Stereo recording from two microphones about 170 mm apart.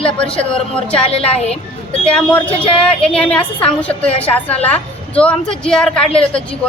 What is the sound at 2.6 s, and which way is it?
Speech, 35° left (ahead or behind).